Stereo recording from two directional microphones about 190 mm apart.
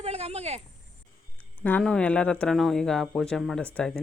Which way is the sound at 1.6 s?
5° left (ahead or behind).